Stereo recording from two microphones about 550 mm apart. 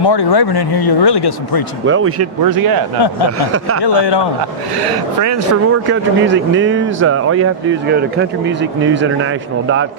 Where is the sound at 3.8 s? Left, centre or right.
Left.